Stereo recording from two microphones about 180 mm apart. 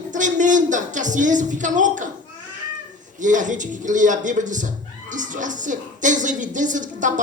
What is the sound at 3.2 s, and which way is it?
A man's voice, 45° right (ahead or behind).